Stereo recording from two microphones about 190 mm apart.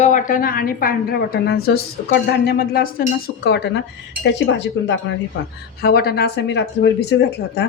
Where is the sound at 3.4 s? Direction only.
65° left (ahead or behind).